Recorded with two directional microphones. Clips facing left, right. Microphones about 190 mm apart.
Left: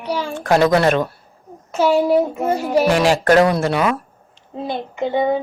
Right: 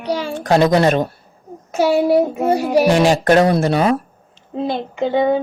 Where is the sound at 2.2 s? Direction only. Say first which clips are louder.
Right 2 dB; 35° right (ahead or behind).